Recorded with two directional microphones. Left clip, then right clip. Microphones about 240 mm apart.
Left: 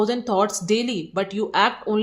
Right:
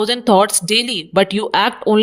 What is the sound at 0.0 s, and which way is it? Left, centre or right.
Speech, right.